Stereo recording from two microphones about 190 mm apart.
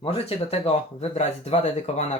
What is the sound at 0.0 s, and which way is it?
Speech, 30° left (ahead or behind).